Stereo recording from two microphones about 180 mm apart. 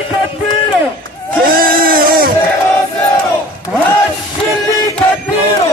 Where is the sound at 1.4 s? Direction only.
55° right (ahead or behind).